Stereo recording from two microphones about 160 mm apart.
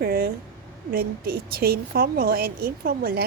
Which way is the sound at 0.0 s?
65° right (ahead or behind).